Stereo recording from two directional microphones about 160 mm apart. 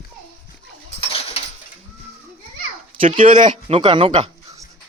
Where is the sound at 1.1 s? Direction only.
35° left (ahead or behind).